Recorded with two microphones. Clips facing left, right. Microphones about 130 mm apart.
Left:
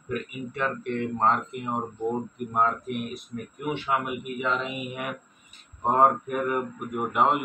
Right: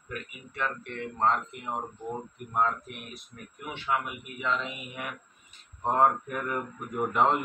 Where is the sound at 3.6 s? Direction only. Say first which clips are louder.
Left 3 dB; 15° left (ahead or behind).